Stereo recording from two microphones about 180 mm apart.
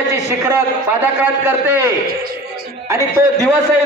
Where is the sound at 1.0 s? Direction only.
10° right (ahead or behind).